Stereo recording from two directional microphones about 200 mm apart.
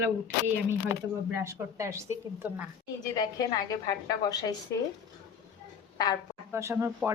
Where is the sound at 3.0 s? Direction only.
20° left (ahead or behind).